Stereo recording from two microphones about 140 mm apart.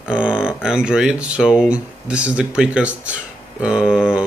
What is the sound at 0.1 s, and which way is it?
A man's voice, 5° right (ahead or behind).